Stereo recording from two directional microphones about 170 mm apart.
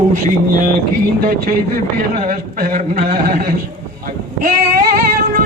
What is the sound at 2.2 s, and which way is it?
A man's voice, 55° right (ahead or behind).